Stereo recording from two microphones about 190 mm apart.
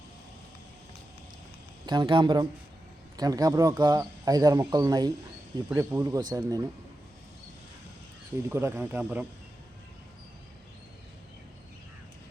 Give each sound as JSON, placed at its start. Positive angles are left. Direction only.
{"t": 1.9, "sound": "speech", "side_deg": -25}
{"t": 8.4, "sound": "speech", "side_deg": -10}